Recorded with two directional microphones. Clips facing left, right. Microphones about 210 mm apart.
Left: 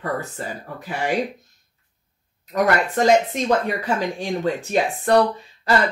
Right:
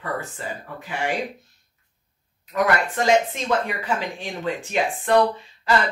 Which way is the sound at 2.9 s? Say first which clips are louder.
Left 3 dB; 40° left (ahead or behind).